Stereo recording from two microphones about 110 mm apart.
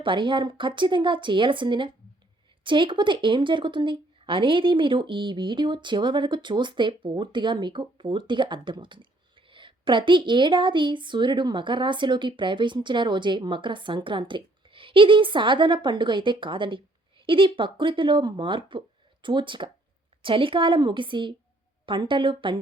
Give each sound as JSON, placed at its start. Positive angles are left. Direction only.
{"t": 0.0, "sound": "a woman's voice", "side_deg": -50}